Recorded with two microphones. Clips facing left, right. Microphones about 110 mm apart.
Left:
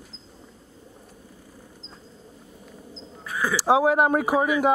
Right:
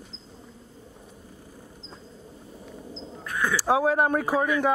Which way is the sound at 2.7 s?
Centre (ahead or behind).